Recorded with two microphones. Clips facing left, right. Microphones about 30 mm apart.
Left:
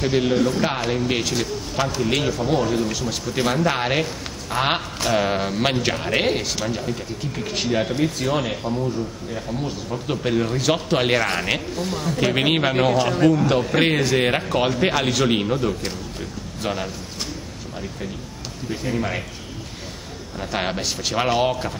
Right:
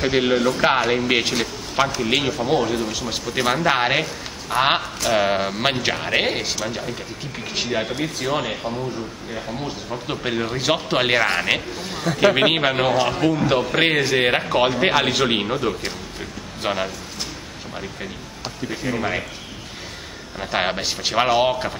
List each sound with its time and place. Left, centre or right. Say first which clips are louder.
0.0 s a man's voice: right 1 dB; right
1.5 s a man's voice: right 2 dB; centre
2.0 s a man's voice: right 1 dB; centre
18.7 s speech: even; centre
20.3 s speech: right 3 dB; centre